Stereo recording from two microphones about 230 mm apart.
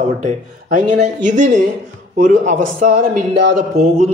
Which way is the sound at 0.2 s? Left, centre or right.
Right.